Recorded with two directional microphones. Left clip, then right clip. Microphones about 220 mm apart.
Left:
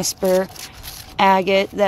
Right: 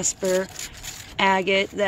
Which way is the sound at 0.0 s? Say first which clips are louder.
Left 5 dB; 15° left (ahead or behind).